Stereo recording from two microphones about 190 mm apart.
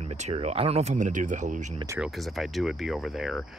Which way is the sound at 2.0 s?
Centre (ahead or behind).